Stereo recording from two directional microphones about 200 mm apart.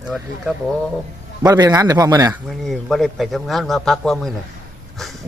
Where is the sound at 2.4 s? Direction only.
Centre (ahead or behind).